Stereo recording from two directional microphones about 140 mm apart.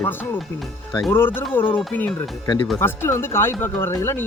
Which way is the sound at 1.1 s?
15° left (ahead or behind).